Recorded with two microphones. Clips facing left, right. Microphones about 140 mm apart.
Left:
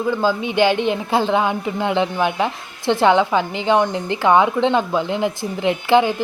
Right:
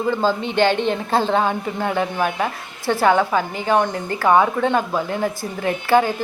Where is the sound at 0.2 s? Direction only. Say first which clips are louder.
Left 1 dB; 10° left (ahead or behind).